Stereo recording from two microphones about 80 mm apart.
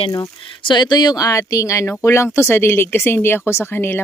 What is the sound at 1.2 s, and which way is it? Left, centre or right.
Speech, left.